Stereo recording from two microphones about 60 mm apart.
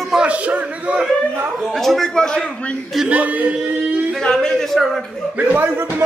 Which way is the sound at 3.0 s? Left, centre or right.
Right.